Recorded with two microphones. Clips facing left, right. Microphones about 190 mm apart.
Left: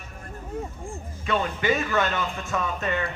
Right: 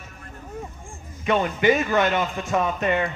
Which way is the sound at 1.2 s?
15° right (ahead or behind).